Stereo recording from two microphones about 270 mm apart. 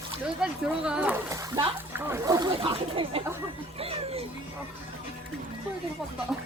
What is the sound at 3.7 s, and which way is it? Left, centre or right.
Music, right.